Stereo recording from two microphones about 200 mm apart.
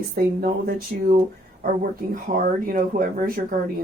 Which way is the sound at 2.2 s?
45° right (ahead or behind).